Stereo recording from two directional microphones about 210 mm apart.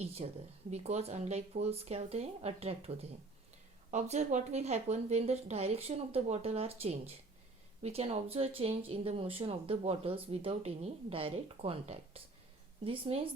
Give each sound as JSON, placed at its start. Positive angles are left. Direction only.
{"t": 0.0, "sound": "speech", "side_deg": -30}